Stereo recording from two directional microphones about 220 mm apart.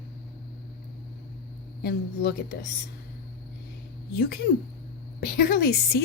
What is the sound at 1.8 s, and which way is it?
Speech, 50° left (ahead or behind).